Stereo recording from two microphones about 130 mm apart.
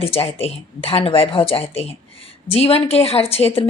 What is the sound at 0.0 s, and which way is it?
A woman's voice, 50° left (ahead or behind).